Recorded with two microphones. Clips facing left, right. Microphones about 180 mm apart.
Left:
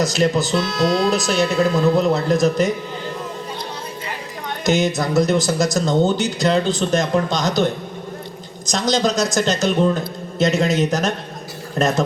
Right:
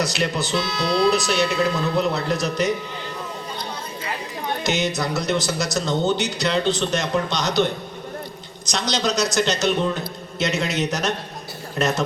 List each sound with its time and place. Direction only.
0.0 s speech: 45° left (ahead or behind)
4.6 s speech: 50° left (ahead or behind)
8.7 s speech: 45° left (ahead or behind)